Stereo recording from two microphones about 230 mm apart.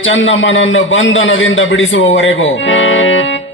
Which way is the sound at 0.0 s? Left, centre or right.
Left.